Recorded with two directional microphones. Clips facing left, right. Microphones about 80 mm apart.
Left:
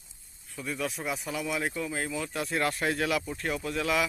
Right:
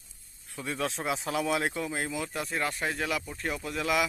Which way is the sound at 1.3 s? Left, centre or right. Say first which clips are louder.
Right 6 dB; right.